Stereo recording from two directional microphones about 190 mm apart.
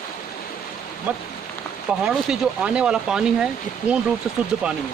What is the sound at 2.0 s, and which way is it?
Speech, 5° right (ahead or behind).